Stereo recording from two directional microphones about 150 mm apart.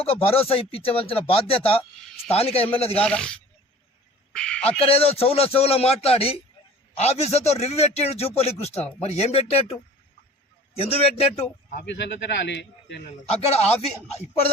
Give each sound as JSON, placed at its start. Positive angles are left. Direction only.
{"t": 0.0, "sound": "speech", "side_deg": 40}
{"t": 3.0, "sound": "speech", "side_deg": 5}
{"t": 4.4, "sound": "speech", "side_deg": 5}
{"t": 4.8, "sound": "a man's voice", "side_deg": 40}
{"t": 10.8, "sound": "speech", "side_deg": 40}
{"t": 13.4, "sound": "a man's voice", "side_deg": 45}